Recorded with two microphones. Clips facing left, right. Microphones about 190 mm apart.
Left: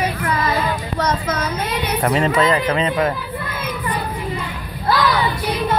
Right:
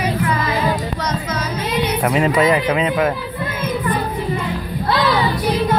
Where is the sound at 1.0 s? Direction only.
55° left (ahead or behind).